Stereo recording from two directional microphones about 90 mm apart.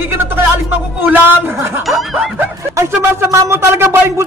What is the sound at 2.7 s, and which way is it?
Speech, 30° right (ahead or behind).